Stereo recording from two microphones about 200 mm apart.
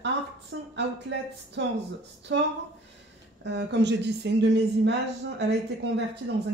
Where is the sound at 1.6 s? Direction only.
60° right (ahead or behind).